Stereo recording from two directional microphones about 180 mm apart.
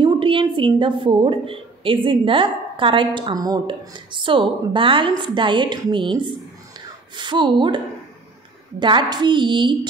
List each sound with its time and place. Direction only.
0.0 s a woman's voice: 30° right (ahead or behind)